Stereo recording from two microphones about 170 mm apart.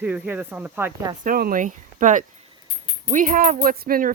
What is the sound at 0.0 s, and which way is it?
Speech, 10° right (ahead or behind).